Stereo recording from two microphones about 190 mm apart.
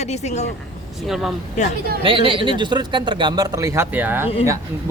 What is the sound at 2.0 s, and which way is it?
Speech, 30° right (ahead or behind).